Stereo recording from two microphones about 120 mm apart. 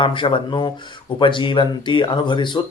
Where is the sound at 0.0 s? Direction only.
45° left (ahead or behind).